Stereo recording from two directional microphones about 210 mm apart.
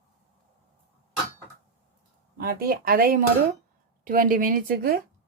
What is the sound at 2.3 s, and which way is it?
Speech, 45° right (ahead or behind).